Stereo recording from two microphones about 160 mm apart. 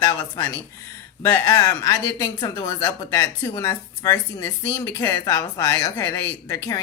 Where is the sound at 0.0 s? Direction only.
20° left (ahead or behind).